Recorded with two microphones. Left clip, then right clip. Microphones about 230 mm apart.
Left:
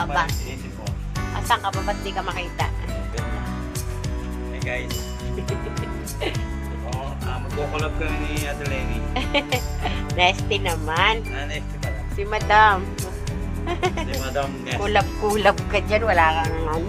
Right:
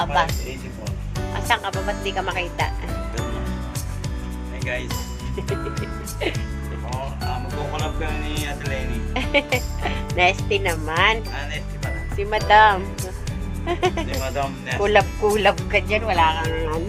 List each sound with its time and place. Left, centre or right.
0.0 s music: right
1.3 s music: centre
9.1 s speech: centre
12.5 s speech: centre
15.2 s speech: centre